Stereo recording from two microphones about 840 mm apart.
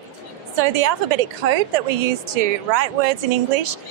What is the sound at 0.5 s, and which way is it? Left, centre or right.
Speech, right.